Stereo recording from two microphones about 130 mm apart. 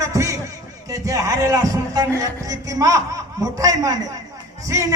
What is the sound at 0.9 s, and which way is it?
A man's voice, 25° right (ahead or behind).